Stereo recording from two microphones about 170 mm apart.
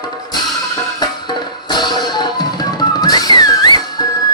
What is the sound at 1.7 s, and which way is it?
Music, 25° left (ahead or behind).